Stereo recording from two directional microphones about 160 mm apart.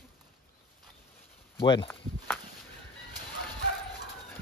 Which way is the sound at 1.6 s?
30° left (ahead or behind).